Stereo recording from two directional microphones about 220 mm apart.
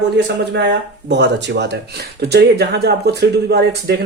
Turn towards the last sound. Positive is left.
turn(degrees=-50)  # may be behind; listen again after turning